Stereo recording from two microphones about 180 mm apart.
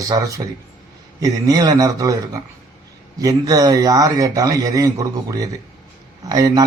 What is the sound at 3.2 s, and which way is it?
Speech, 20° right (ahead or behind).